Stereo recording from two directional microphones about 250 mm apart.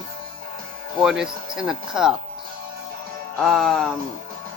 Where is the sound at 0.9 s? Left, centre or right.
Centre.